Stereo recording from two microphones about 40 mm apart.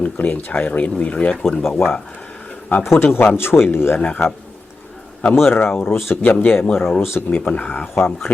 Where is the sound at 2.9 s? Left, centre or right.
Left.